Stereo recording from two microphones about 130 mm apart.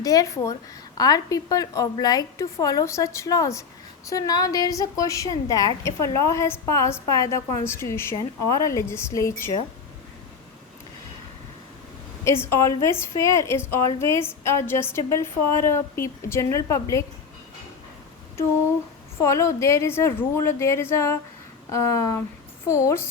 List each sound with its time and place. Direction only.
0.0 s a woman's voice: 25° left (ahead or behind)
12.2 s a woman's voice: 20° left (ahead or behind)
19.2 s a woman's voice: 25° left (ahead or behind)